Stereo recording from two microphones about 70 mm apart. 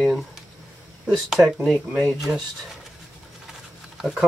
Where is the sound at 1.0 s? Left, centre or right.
Centre.